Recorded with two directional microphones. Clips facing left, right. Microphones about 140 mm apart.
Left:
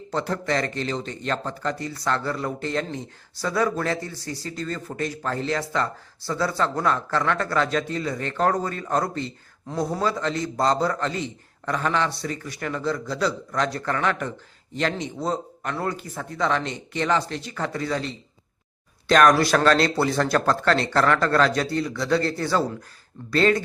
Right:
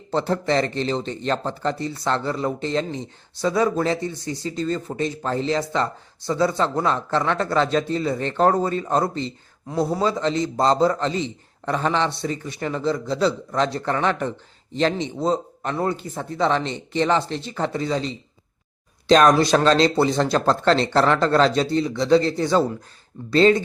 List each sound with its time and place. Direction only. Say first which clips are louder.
0.1 s speech: right 4 dB; 25° right (ahead or behind)
9.6 s a man's voice: right 4 dB; 10° right (ahead or behind)
10.0 s speech: right 3 dB; 25° right (ahead or behind)